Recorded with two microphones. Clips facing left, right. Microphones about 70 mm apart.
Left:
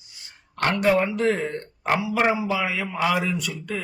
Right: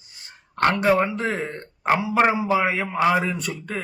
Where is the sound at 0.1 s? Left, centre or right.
Right.